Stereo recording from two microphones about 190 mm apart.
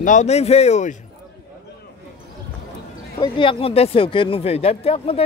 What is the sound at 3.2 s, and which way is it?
Speech, 25° left (ahead or behind).